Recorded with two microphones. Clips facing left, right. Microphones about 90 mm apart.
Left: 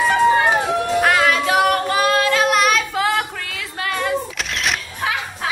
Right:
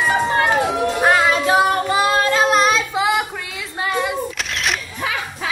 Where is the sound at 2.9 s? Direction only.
15° right (ahead or behind).